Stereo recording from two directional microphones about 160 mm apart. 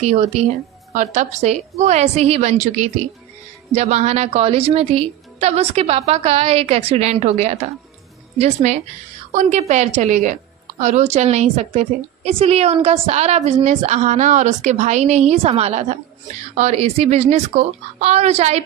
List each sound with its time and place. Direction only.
0.0 s a woman's voice: 45° right (ahead or behind)